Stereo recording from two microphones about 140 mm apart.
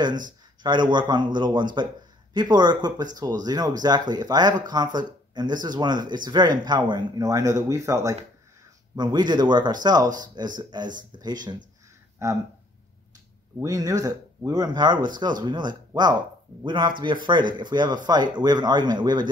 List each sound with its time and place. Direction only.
0.6 s speech: 35° right (ahead or behind)
13.6 s speech: 25° right (ahead or behind)